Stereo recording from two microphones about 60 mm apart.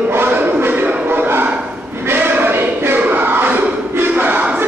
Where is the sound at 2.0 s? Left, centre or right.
Right.